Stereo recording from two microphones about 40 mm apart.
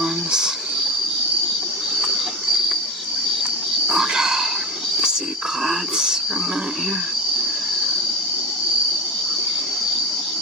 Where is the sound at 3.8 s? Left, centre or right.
Centre.